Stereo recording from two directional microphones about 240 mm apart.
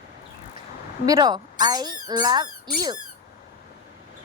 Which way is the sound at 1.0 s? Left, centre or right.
Centre.